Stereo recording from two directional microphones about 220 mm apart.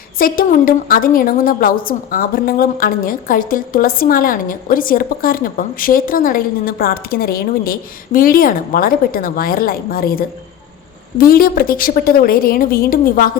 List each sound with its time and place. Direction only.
0.2 s a woman's voice: 40° left (ahead or behind)